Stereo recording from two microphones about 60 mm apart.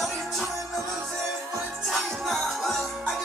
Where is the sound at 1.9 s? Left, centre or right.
Centre.